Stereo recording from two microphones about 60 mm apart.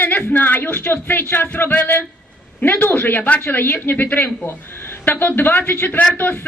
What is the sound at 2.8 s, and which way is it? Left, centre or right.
A man's voice, left.